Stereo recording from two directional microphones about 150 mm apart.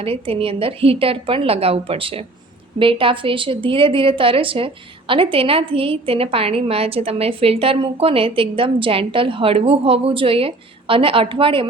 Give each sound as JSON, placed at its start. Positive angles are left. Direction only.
{"t": 0.0, "sound": "a woman's voice", "side_deg": -40}